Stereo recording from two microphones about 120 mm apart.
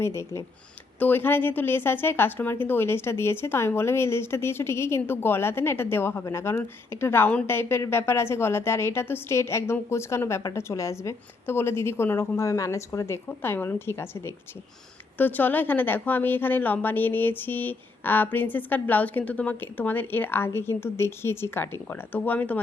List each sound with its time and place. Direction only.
0.0 s a woman's voice: 20° left (ahead or behind)